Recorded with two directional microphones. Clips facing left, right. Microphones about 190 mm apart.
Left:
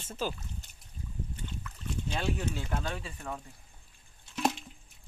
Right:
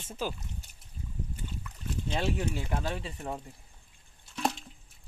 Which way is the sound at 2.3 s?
10° right (ahead or behind).